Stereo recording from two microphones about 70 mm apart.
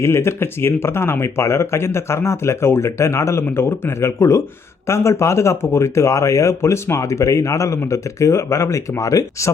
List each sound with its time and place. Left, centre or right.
0.0 s speech: left